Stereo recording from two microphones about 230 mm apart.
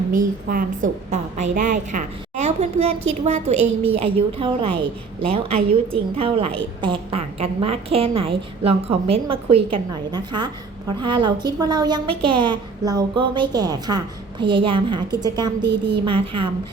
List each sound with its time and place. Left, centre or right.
0.1 s a woman's voice: right; by 15.5 s centre
15.6 s a woman's voice: right